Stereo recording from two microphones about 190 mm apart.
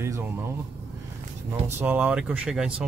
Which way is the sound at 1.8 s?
10° right (ahead or behind).